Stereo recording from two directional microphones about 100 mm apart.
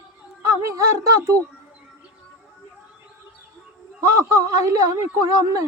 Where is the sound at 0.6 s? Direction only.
30° right (ahead or behind).